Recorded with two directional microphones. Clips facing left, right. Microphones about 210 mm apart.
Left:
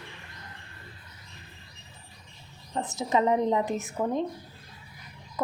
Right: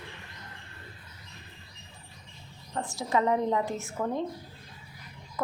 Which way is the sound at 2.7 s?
20° left (ahead or behind).